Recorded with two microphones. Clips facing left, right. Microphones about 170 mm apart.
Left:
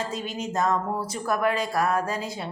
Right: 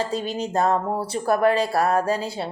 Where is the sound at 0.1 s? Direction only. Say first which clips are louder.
Right 5 dB; 35° right (ahead or behind).